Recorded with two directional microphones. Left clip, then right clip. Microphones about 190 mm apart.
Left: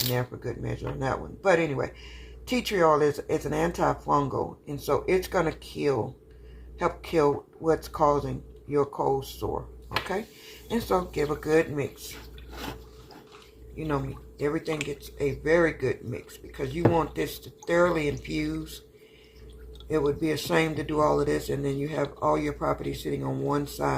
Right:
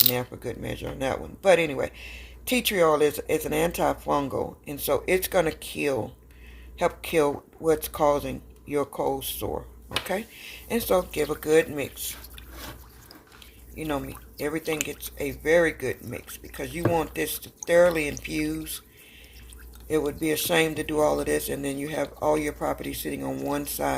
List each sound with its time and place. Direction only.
0.1 s speech: 50° right (ahead or behind)
10.7 s speech: 45° right (ahead or behind)
13.7 s speech: 55° right (ahead or behind)
19.9 s speech: 50° right (ahead or behind)